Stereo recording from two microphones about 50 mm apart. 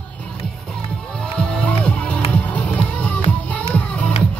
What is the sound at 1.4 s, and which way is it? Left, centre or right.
Music, centre.